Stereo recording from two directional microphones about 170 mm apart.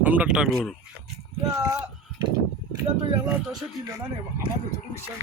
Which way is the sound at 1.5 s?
20° right (ahead or behind).